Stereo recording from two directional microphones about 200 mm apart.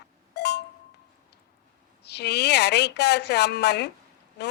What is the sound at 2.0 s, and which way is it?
A woman's voice, 55° left (ahead or behind).